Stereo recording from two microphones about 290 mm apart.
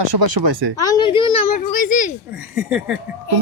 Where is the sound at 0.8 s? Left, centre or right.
Centre.